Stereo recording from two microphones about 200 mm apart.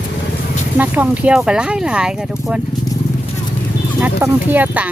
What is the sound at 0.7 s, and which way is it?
Speech, 10° right (ahead or behind).